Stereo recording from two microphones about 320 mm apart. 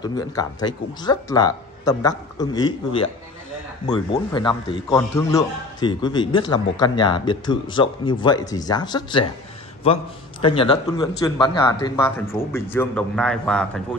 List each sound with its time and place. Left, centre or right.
0.0 s a man's voice: centre
10.4 s a man's voice: centre